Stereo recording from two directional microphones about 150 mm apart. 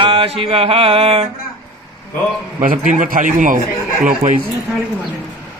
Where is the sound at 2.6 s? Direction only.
65° right (ahead or behind).